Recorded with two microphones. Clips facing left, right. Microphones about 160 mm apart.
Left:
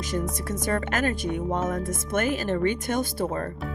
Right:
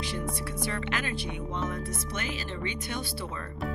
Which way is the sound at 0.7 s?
45° left (ahead or behind).